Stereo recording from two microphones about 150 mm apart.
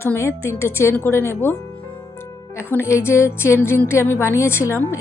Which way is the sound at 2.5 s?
15° left (ahead or behind).